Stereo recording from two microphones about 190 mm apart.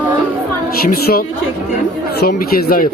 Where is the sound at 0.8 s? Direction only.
50° left (ahead or behind).